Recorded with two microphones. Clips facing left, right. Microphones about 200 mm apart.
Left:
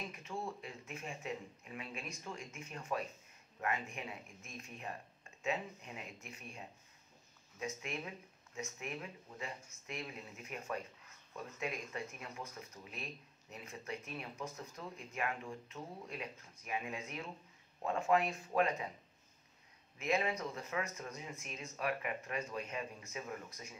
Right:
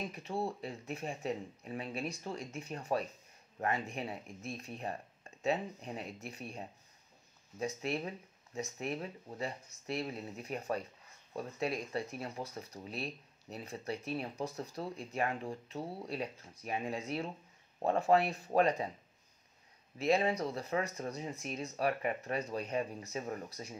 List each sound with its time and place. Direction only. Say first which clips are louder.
0.1 s speech: right 6 dB; 35° right (ahead or behind)
20.0 s speech: right 5 dB; 35° right (ahead or behind)